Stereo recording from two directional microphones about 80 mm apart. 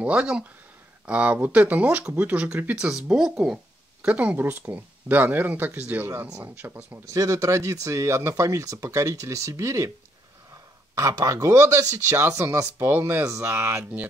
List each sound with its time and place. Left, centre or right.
0.0 s speech: centre
7.1 s speech: right
11.0 s speech: right
13.2 s speech: right